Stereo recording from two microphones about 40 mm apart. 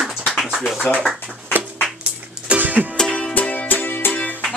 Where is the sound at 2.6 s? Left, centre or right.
Right.